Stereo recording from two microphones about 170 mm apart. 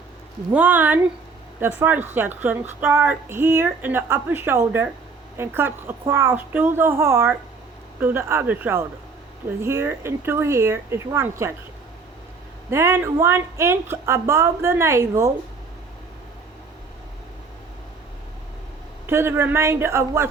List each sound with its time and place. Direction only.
0.5 s a woman's voice: 10° right (ahead or behind)
12.7 s a woman's voice: 15° right (ahead or behind)
19.0 s a woman's voice: 15° right (ahead or behind)